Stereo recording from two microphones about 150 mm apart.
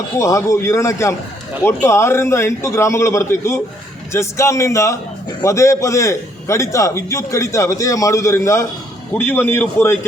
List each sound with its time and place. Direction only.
0.2 s a man's voice: 20° left (ahead or behind)